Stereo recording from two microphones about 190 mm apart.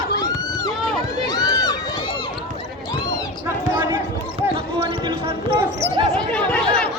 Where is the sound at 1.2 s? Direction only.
20° left (ahead or behind).